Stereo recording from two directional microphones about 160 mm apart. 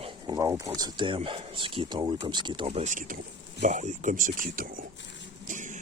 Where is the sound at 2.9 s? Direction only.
60° right (ahead or behind).